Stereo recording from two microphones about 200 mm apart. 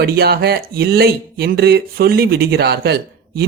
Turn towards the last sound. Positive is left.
turn(degrees=-50)  # may be behind; listen again after turning